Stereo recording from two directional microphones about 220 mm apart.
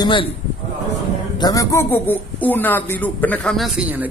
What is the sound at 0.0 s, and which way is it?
Speech, 20° left (ahead or behind).